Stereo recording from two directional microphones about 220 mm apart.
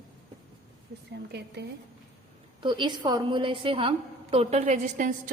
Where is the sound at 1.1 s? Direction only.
50° right (ahead or behind).